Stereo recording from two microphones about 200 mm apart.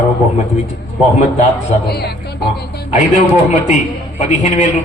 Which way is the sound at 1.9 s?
55° left (ahead or behind).